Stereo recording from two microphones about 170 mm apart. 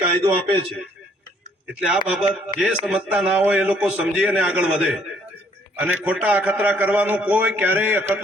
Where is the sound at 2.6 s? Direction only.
5° right (ahead or behind).